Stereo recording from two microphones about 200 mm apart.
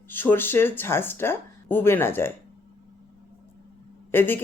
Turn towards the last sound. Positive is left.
turn(degrees=10)  # may be behind; listen again after turning